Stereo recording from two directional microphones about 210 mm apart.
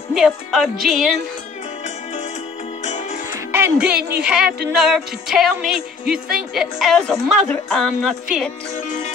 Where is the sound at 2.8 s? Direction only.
35° left (ahead or behind).